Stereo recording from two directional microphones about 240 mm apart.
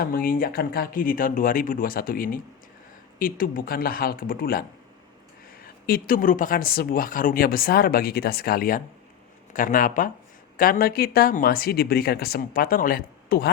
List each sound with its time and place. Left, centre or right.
0.0 s speech: left
5.8 s speech: left